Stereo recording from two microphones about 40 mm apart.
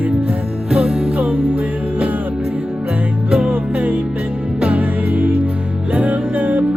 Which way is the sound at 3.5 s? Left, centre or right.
Right.